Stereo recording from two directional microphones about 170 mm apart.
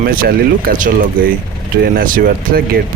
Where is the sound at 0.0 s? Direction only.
60° right (ahead or behind).